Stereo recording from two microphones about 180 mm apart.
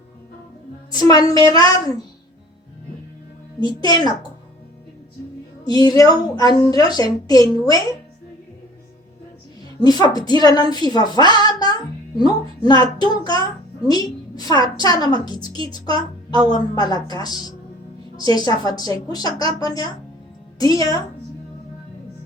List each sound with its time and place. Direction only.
0.9 s a woman's voice: 20° left (ahead or behind)
3.8 s a woman's voice: 20° left (ahead or behind)
5.8 s a woman's voice: 20° left (ahead or behind)
9.8 s a woman's voice: 20° left (ahead or behind)
15.9 s a woman's voice: 30° right (ahead or behind)
16.5 s a woman's voice: 20° left (ahead or behind)